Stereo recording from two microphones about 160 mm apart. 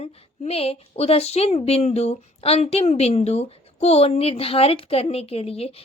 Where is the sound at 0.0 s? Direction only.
40° left (ahead or behind).